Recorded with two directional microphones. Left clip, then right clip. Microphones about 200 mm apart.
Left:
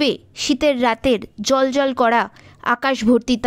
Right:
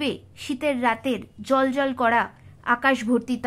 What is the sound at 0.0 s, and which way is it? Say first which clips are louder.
A woman's voice: left 9 dB; 30° left (ahead or behind).